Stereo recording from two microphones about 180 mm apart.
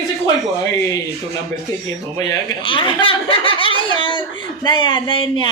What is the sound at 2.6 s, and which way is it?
Speech, 30° left (ahead or behind).